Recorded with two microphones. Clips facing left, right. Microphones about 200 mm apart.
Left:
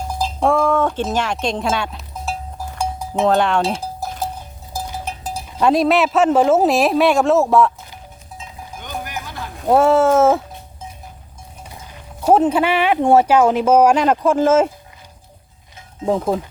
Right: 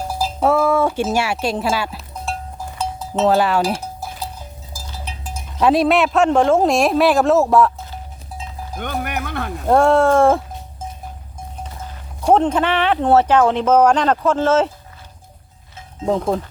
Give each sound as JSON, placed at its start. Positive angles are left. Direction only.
{"t": 0.1, "sound": "wind chime", "side_deg": -5}
{"t": 3.2, "sound": "a man's voice", "side_deg": -5}
{"t": 3.8, "sound": "cowbell", "side_deg": 40}
{"t": 4.7, "sound": "a sound", "side_deg": 60}
{"t": 5.5, "sound": "a man's voice", "side_deg": 0}
{"t": 8.8, "sound": "music", "side_deg": -65}
{"t": 9.6, "sound": "a man's voice", "side_deg": 5}
{"t": 12.2, "sound": "speech", "side_deg": 5}
{"t": 16.0, "sound": "a man's voice", "side_deg": 5}